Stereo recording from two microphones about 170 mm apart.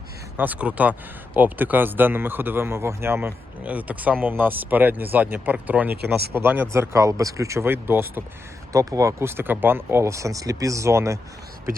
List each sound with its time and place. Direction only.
0.3 s speech: 10° right (ahead or behind)